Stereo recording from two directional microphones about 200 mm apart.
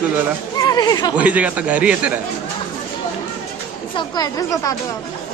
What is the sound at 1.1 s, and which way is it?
A man's voice, 5° right (ahead or behind).